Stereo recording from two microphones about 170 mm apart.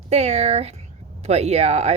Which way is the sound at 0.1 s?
40° right (ahead or behind).